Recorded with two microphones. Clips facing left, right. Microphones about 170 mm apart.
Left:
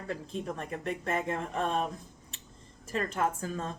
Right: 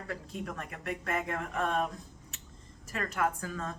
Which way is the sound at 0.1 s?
25° left (ahead or behind).